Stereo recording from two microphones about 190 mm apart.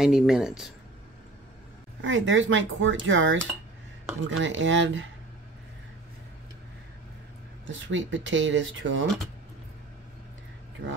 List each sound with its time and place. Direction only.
0.0 s speech: 5° right (ahead or behind)
2.0 s speech: 85° right
7.6 s speech: 80° right